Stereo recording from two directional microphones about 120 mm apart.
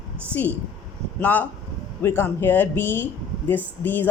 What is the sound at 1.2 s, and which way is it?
Speech, 15° left (ahead or behind).